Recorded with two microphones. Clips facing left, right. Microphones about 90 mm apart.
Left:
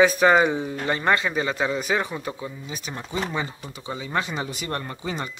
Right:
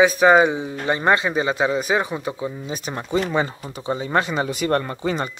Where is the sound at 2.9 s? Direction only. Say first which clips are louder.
Right 6 dB; 65° right (ahead or behind).